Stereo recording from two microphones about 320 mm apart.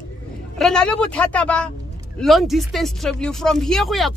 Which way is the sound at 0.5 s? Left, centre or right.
Centre.